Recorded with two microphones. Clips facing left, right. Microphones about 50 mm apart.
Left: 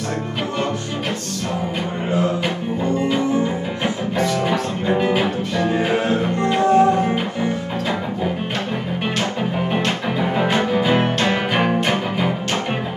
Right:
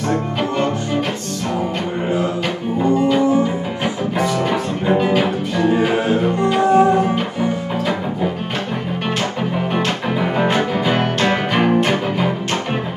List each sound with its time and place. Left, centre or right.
4.2 s music: centre
10.2 s music: centre
10.8 s music: centre